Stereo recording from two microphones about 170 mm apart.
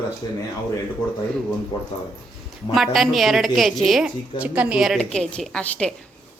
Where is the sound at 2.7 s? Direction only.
Centre (ahead or behind).